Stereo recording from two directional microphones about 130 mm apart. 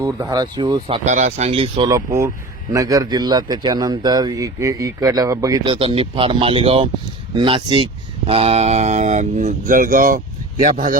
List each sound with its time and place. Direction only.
0.0 s speech: 30° right (ahead or behind)
1.0 s speech: 65° right (ahead or behind); by 1.9 s 40° right (ahead or behind)
1.9 s a man's voice: 20° right (ahead or behind)
5.6 s speech: 45° right (ahead or behind); by 10.9 s 85° right